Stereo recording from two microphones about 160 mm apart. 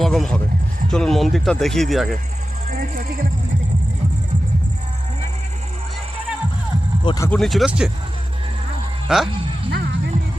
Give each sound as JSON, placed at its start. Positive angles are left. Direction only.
{"t": 0.0, "sound": "speech", "side_deg": 0}
{"t": 7.0, "sound": "speech", "side_deg": 30}
{"t": 7.3, "sound": "speech", "side_deg": 0}
{"t": 9.0, "sound": "speech", "side_deg": -5}